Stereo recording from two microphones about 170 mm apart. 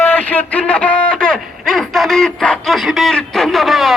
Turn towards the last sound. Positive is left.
turn(degrees=0)  # may be behind; listen again after turning